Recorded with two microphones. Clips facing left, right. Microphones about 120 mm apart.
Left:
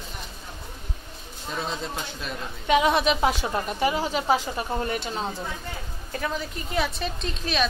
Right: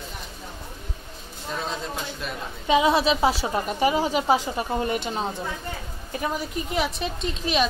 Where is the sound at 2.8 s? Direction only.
30° right (ahead or behind).